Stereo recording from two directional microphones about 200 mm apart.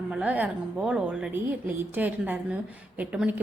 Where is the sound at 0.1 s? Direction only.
5° right (ahead or behind).